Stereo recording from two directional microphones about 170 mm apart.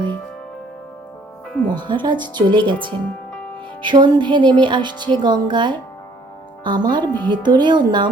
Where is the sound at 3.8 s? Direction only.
25° right (ahead or behind).